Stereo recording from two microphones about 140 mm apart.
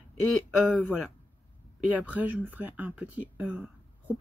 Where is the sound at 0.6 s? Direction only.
10° left (ahead or behind).